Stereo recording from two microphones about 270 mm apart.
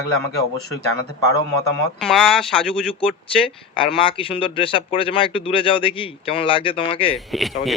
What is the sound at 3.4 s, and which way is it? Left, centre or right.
Speech, centre.